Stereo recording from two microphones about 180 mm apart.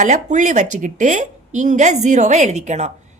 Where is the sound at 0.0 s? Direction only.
40° right (ahead or behind).